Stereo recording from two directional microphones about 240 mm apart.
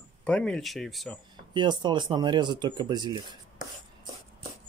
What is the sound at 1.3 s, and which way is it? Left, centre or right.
Speech, centre.